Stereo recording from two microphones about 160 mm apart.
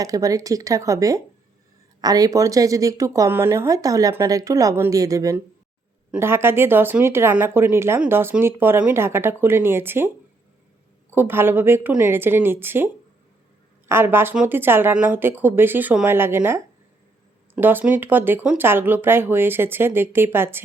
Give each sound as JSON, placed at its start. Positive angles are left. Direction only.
{"t": 0.0, "sound": "speech", "side_deg": -20}
{"t": 11.1, "sound": "speech", "side_deg": -15}